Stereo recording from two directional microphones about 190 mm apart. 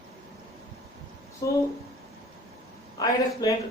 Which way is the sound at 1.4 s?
20° left (ahead or behind).